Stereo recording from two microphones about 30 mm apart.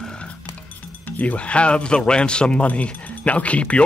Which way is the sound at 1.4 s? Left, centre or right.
Left.